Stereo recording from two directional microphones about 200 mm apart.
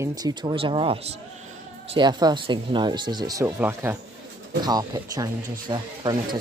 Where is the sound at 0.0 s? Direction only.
20° right (ahead or behind).